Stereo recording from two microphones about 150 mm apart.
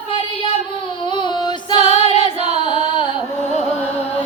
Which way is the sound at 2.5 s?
45° right (ahead or behind).